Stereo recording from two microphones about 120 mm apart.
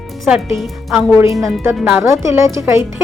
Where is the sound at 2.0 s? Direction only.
25° right (ahead or behind).